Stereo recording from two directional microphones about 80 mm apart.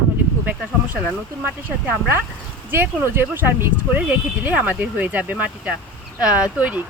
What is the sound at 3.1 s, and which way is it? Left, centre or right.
Speech, right.